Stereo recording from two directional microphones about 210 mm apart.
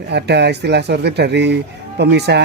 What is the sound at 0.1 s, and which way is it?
Speech, 55° right (ahead or behind).